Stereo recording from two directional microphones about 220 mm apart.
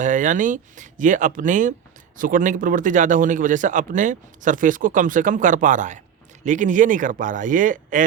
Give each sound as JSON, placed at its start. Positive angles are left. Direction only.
{"t": 0.0, "sound": "a man's voice", "side_deg": -35}